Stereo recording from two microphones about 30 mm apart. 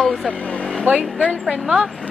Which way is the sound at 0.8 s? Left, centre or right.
Right.